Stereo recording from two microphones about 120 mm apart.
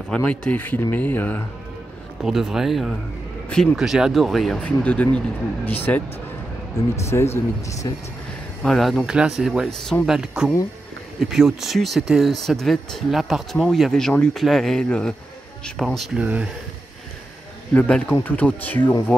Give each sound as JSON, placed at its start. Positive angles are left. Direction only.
{"t": 0.1, "sound": "speech", "side_deg": 10}
{"t": 2.2, "sound": "speech", "side_deg": -5}
{"t": 8.6, "sound": "speech", "side_deg": 5}
{"t": 16.2, "sound": "speech", "side_deg": -10}
{"t": 17.7, "sound": "speech", "side_deg": 10}